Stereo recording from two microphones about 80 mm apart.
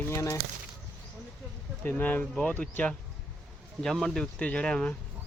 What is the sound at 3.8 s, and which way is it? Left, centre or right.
Speech, centre.